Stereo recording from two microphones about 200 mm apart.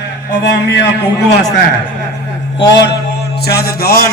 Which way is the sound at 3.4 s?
50° left (ahead or behind).